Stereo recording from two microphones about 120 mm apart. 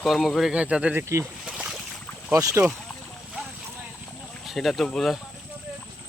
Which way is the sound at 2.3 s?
25° right (ahead or behind).